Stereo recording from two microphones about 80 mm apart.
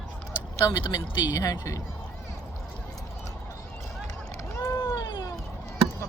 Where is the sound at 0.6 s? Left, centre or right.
Left.